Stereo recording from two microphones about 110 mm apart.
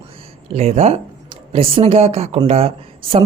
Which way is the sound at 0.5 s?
75° right (ahead or behind).